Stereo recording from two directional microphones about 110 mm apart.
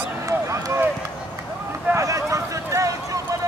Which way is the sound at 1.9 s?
30° right (ahead or behind).